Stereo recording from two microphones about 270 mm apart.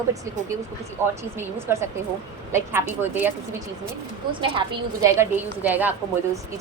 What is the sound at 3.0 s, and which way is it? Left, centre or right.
Speech, centre.